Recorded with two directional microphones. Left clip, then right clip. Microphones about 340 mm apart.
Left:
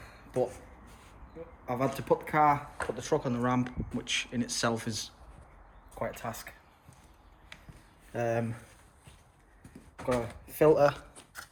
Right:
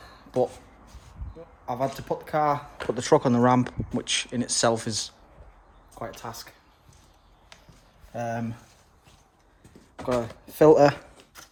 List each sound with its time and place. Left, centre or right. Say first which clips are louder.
1.6 s speech: right 2 dB; centre
2.9 s speech: right 11 dB; right; by 6.5 s centre
8.1 s speech: even; centre
10.1 s speech: right 4 dB; centre